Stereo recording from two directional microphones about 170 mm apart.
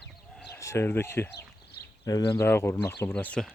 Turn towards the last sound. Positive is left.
turn(degrees=5)  # may be behind; listen again after turning